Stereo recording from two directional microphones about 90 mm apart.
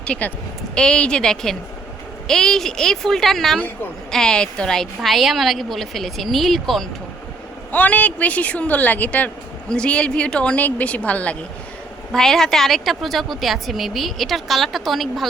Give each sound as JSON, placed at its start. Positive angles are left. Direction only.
{"t": 0.0, "sound": "a woman's voice", "side_deg": 15}
{"t": 7.7, "sound": "speech", "side_deg": 15}
{"t": 12.1, "sound": "a woman's voice", "side_deg": 5}